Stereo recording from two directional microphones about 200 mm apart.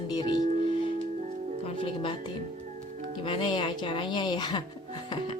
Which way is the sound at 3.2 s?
25° left (ahead or behind).